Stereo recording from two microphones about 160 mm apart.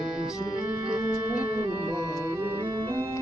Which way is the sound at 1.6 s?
25° right (ahead or behind).